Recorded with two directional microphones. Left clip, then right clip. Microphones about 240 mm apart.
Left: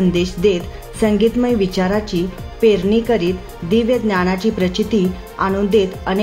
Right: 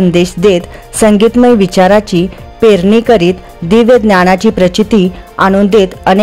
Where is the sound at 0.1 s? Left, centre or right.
Right.